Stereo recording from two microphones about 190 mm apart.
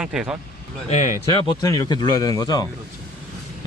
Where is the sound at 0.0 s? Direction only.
5° right (ahead or behind).